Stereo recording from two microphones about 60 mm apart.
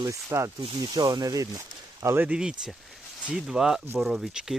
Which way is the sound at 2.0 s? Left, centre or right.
Right.